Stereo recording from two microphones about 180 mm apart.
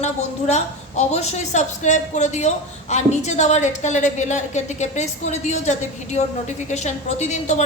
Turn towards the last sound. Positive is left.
turn(degrees=40)  # may be behind; listen again after turning